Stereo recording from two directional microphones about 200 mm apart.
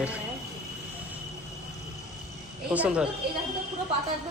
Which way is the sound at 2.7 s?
5° right (ahead or behind).